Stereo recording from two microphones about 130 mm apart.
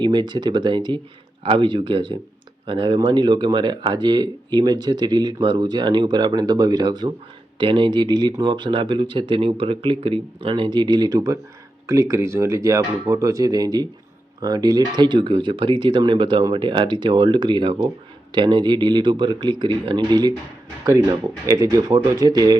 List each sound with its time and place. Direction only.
0.0 s speech: 35° right (ahead or behind)
21.4 s speech: 25° right (ahead or behind)